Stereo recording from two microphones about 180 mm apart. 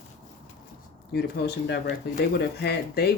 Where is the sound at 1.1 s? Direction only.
60° left (ahead or behind).